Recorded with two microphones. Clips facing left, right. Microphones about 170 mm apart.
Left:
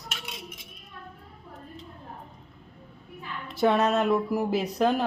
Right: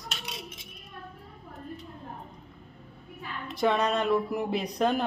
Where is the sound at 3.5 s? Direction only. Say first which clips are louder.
Left 3 dB; 5° left (ahead or behind).